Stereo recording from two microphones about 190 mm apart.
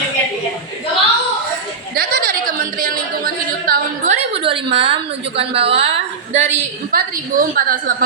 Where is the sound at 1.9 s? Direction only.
55° right (ahead or behind); by 6.5 s 35° right (ahead or behind).